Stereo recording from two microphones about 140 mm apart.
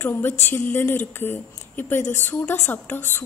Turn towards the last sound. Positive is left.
turn(degrees=15)  # may be behind; listen again after turning